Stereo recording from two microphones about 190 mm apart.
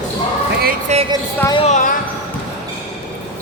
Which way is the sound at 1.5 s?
35° left (ahead or behind).